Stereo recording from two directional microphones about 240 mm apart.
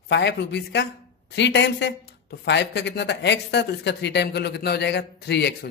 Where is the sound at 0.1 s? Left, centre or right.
Left.